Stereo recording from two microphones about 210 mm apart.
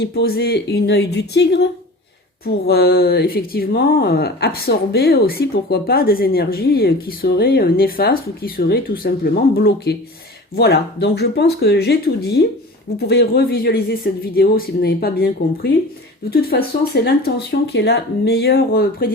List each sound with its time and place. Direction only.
0.0 s speech: 50° left (ahead or behind)
2.6 s speech: 50° left (ahead or behind)